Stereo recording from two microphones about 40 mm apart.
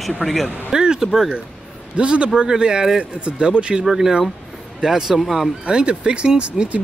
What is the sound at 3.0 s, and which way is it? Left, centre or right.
Speech, right.